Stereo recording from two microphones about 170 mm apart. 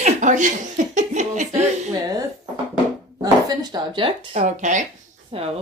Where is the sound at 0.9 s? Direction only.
45° right (ahead or behind).